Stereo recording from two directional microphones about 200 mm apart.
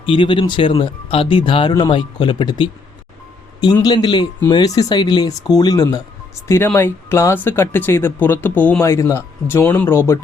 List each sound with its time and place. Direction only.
0.0 s speech: 25° left (ahead or behind)